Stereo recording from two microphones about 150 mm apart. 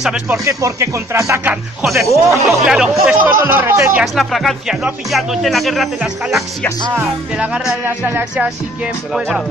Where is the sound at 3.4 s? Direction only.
15° right (ahead or behind).